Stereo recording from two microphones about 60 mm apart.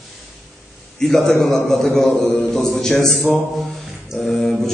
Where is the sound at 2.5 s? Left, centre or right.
Centre.